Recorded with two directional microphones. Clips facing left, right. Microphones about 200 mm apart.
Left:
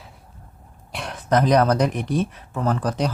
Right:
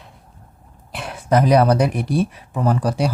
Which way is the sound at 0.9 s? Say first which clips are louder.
Right 2 dB; 5° right (ahead or behind).